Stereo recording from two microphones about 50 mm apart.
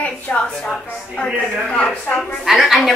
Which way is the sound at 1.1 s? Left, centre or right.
Centre.